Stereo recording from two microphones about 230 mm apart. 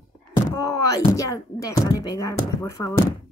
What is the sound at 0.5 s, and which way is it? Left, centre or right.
Speech, centre.